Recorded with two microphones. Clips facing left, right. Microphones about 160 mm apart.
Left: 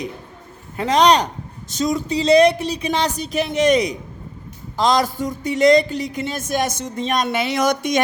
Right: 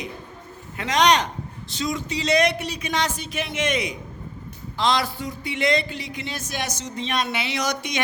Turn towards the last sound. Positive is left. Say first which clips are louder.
# left 8 dB
turn(degrees=50)  # may be behind; listen again after turning